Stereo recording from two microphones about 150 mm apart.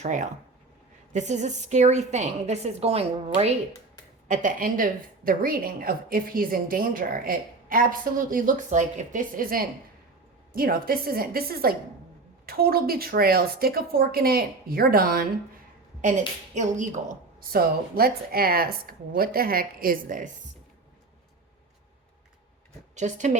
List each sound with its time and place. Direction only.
0.0 s a woman's voice: 55° right (ahead or behind)
4.3 s a woman's voice: 65° right (ahead or behind); by 15.3 s 85° right
16.6 s a woman's voice: 55° right (ahead or behind)
17.5 s a woman's voice: 85° right; by 20.3 s 65° right (ahead or behind)
23.0 s a woman's voice: 50° right (ahead or behind)